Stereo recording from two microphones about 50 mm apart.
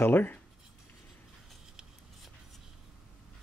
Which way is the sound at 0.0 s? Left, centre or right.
Left.